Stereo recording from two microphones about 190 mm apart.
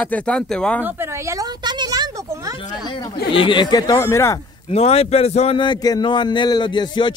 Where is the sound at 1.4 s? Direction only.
20° right (ahead or behind).